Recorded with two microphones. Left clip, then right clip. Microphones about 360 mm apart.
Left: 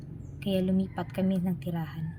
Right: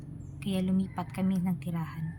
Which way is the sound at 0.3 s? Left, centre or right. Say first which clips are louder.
Left 4 dB; right.